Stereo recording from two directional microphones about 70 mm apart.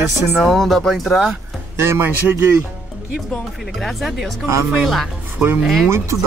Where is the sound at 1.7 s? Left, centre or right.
Right.